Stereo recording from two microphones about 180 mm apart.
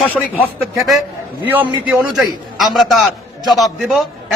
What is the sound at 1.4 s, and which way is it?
Speech, 10° right (ahead or behind).